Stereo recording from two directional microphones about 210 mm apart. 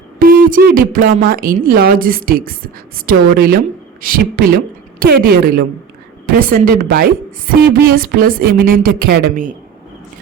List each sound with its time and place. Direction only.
0.2 s a woman's voice: 40° right (ahead or behind)